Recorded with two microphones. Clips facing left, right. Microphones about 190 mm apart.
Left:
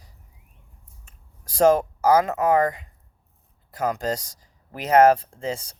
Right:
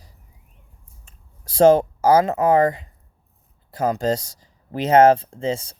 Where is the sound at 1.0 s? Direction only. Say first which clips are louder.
Right 4 dB; 25° right (ahead or behind).